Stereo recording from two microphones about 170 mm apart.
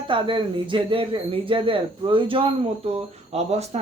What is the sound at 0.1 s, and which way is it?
Speech, 30° right (ahead or behind).